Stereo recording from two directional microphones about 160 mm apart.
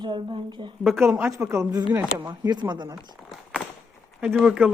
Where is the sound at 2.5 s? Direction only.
25° right (ahead or behind).